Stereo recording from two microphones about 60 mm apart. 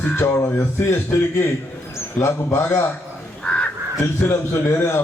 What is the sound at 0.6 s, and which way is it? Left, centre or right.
A man's voice, left.